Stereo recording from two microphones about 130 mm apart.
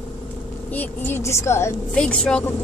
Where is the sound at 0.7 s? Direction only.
15° left (ahead or behind).